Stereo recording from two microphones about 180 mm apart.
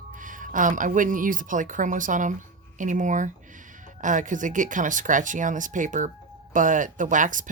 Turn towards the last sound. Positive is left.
turn(degrees=-45)  # may be behind; listen again after turning